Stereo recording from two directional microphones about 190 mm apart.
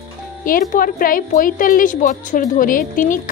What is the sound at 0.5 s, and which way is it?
A woman's voice, 45° left (ahead or behind).